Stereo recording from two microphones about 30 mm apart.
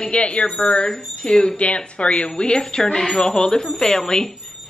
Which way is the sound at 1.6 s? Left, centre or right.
Left.